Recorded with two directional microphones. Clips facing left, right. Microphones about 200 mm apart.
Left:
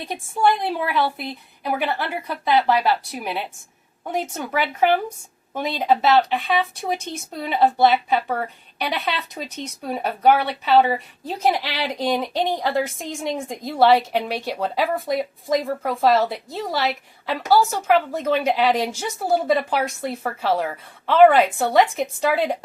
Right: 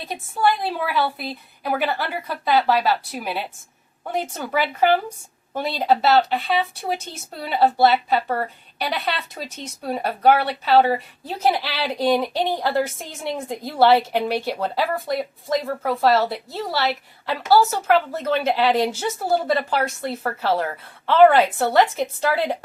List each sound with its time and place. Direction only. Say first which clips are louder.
0.0 s speech: left 1 dB; centre (ahead or behind)
9.4 s speech: left 1 dB; 5° right (ahead or behind)